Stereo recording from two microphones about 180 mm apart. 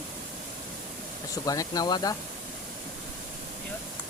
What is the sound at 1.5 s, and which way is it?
Speech, 20° left (ahead or behind).